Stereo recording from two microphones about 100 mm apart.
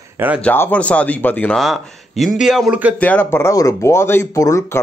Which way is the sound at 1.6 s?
Centre (ahead or behind).